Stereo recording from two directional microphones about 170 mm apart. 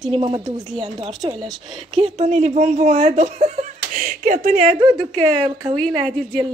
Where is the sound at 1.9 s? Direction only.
40° right (ahead or behind).